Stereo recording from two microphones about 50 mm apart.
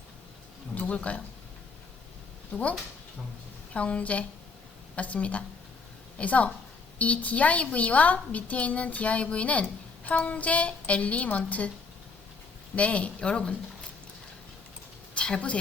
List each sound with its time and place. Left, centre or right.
0.8 s speech: left
3.8 s a woman's voice: left
12.7 s a woman's voice: left
15.1 s a sound: centre